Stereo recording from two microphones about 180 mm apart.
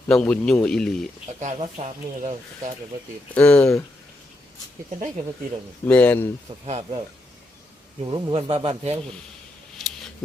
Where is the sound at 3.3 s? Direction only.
5° left (ahead or behind).